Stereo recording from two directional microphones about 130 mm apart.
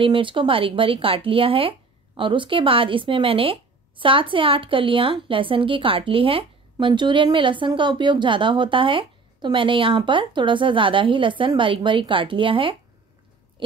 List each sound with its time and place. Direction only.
0.0 s speech: 40° right (ahead or behind)